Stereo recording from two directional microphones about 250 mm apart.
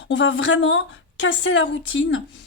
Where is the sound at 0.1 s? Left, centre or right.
Left.